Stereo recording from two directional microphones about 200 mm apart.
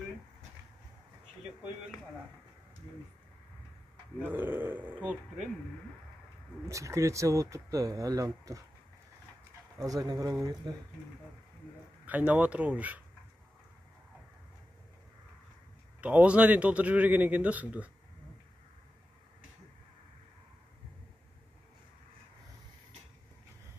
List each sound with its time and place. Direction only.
4.2 s a man's voice: 10° right (ahead or behind)
6.7 s a man's voice: 15° right (ahead or behind)
9.8 s speech: 20° right (ahead or behind)
12.1 s a man's voice: 5° right (ahead or behind)
16.0 s a man's voice: 5° right (ahead or behind)